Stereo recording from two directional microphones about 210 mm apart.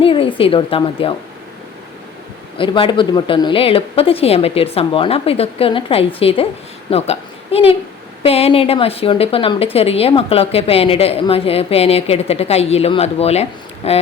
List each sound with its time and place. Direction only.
0.0 s a woman's voice: 25° left (ahead or behind)
2.6 s a woman's voice: 25° left (ahead or behind)